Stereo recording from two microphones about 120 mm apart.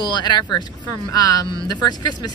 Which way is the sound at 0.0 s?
40° left (ahead or behind).